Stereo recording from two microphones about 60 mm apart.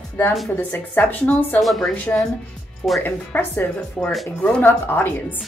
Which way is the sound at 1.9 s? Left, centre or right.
Left.